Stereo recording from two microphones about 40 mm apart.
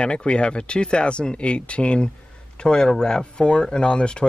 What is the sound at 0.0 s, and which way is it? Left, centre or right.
A man's voice, left.